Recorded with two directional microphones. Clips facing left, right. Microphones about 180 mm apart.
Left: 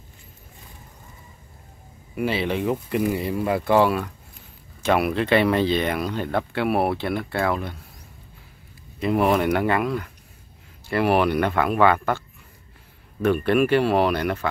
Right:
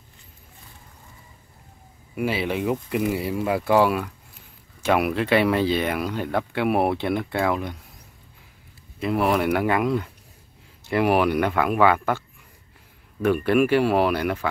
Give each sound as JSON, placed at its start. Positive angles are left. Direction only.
{"t": 2.1, "sound": "speech", "side_deg": -10}
{"t": 9.0, "sound": "speech", "side_deg": 0}
{"t": 9.8, "sound": "speech", "side_deg": -20}
{"t": 13.2, "sound": "speech", "side_deg": -10}